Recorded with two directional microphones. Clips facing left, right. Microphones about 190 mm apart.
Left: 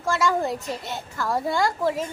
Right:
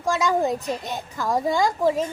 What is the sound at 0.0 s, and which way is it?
A child's voice, 15° right (ahead or behind).